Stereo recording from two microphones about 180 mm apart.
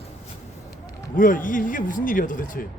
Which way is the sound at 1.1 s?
50° left (ahead or behind).